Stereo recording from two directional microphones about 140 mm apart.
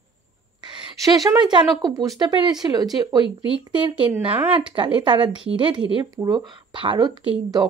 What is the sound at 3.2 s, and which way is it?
Speech, 35° left (ahead or behind).